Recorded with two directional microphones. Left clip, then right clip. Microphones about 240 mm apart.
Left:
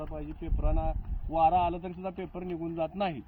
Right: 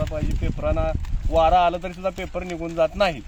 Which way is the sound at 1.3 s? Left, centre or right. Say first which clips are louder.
Right 8 dB; right.